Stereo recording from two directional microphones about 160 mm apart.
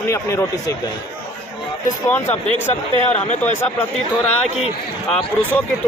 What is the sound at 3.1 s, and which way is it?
Speech, 45° left (ahead or behind).